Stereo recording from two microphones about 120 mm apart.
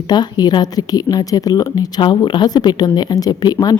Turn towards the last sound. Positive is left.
turn(degrees=35)  # may be behind; listen again after turning